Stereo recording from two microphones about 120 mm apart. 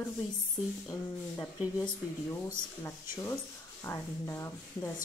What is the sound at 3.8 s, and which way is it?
Speech, 20° left (ahead or behind).